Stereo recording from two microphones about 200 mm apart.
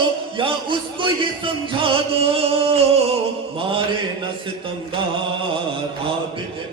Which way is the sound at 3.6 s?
25° right (ahead or behind).